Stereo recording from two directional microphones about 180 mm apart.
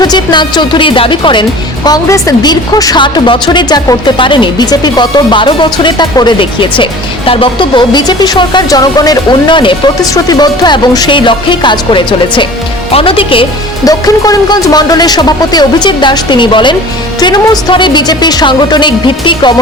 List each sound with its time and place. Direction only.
0.0 s speech: 25° left (ahead or behind)